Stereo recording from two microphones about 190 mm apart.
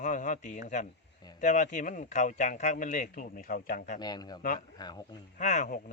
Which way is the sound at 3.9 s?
20° left (ahead or behind).